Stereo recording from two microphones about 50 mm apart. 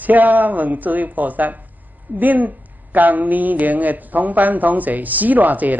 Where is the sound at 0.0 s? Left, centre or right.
Right.